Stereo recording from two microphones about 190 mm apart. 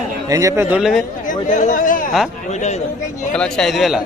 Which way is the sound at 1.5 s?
45° left (ahead or behind).